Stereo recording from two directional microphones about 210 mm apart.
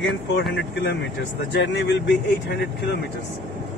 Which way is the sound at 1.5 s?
55° left (ahead or behind).